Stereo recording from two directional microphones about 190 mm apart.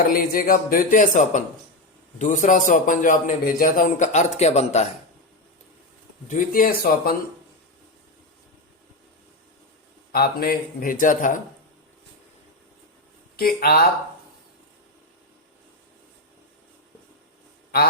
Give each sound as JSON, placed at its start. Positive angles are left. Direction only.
{"t": 0.1, "sound": "a man's voice", "side_deg": 50}
{"t": 6.2, "sound": "speech", "side_deg": 45}
{"t": 10.1, "sound": "speech", "side_deg": 50}
{"t": 13.3, "sound": "speech", "side_deg": 55}